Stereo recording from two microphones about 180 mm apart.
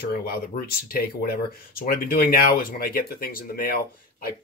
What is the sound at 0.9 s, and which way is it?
Speech, 55° left (ahead or behind).